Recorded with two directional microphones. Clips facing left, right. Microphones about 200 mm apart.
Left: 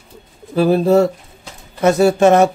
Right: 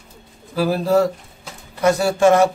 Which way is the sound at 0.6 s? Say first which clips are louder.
Left 5 dB; 25° left (ahead or behind).